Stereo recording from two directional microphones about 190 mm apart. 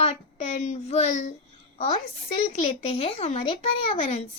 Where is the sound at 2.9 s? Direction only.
30° left (ahead or behind).